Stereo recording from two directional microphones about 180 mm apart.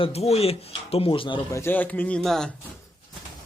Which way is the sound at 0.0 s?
35° left (ahead or behind).